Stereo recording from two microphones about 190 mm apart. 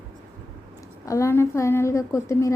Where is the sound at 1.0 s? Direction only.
15° left (ahead or behind).